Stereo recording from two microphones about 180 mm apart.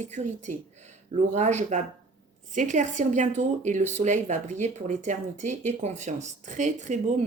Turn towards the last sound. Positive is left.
turn(degrees=-40)  # may be behind; listen again after turning